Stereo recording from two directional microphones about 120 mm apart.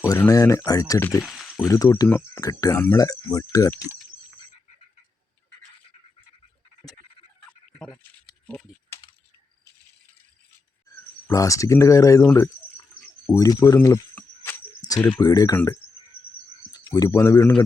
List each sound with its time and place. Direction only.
0.3 s speech: 25° left (ahead or behind)
1.2 s a sound: centre (ahead or behind)
1.6 s speech: 25° left (ahead or behind)
8.9 s typing: 20° left (ahead or behind)
10.8 s speech: 25° left (ahead or behind)
14.8 s a sound: 30° left (ahead or behind)
15.2 s speech: 30° left (ahead or behind)
15.5 s speech: 20° left (ahead or behind)
16.7 s speech: 30° left (ahead or behind)